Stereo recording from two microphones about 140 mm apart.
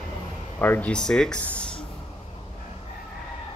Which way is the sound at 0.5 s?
10° left (ahead or behind).